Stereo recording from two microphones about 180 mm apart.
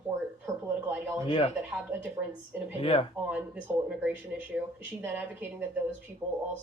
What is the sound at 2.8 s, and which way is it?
Speech, 30° left (ahead or behind).